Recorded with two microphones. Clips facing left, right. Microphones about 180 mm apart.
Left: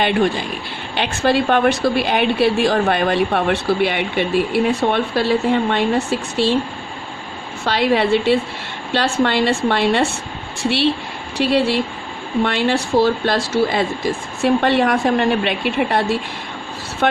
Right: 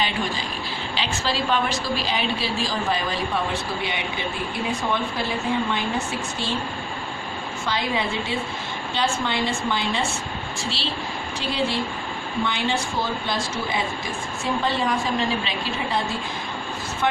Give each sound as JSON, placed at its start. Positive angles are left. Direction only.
{"t": 0.0, "sound": "a woman's voice", "side_deg": 60}
{"t": 7.6, "sound": "a woman's voice", "side_deg": 75}
{"t": 11.3, "sound": "a woman's voice", "side_deg": 75}